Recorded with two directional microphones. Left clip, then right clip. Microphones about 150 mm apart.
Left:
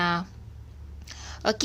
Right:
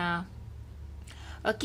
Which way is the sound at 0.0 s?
30° left (ahead or behind).